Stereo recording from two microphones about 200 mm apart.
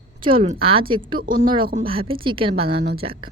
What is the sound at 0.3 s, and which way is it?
Speech, 25° right (ahead or behind).